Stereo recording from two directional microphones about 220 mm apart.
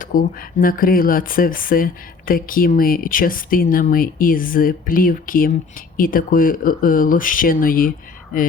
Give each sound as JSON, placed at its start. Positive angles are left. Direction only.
{"t": 0.0, "sound": "speech", "side_deg": 40}